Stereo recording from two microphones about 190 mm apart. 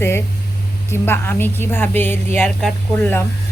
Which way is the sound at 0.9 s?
10° left (ahead or behind).